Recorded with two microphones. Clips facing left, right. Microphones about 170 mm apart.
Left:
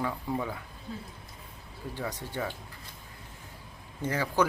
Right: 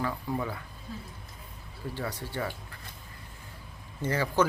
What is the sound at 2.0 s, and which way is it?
Speech, 15° left (ahead or behind).